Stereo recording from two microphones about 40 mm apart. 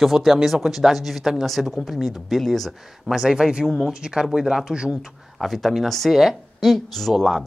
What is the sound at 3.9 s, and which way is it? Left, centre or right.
Speech, centre.